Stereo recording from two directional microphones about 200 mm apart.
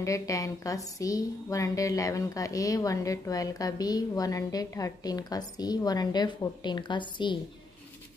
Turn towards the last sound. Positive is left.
turn(degrees=25)  # may be behind; listen again after turning